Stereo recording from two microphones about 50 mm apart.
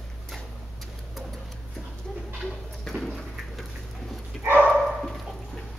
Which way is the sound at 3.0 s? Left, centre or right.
Centre.